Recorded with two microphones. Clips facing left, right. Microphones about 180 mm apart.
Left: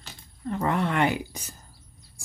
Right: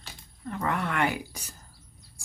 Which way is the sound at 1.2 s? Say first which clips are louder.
Left 3 dB; centre (ahead or behind).